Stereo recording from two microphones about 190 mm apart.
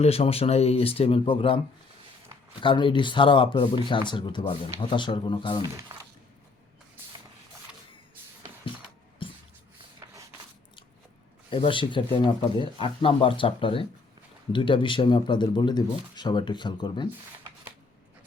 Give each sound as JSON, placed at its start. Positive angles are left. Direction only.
{"t": 0.0, "sound": "speech", "side_deg": 30}
{"t": 7.0, "sound": "shuffle", "side_deg": -10}
{"t": 9.2, "sound": "a sound", "side_deg": 25}
{"t": 11.5, "sound": "speech", "side_deg": 25}